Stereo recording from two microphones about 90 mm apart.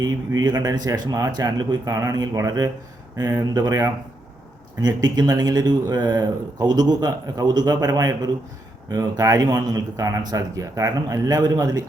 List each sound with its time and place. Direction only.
0.0 s speech: 50° right (ahead or behind)
1.8 s speech: 40° right (ahead or behind)
3.4 s speech: 45° right (ahead or behind)